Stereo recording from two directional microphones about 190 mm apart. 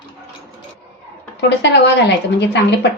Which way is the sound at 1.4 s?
65° left (ahead or behind).